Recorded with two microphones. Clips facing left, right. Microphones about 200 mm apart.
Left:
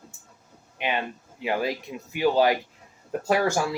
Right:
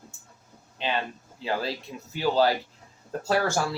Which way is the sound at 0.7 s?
15° left (ahead or behind).